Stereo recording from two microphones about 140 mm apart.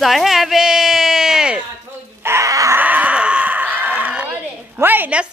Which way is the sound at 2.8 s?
10° right (ahead or behind).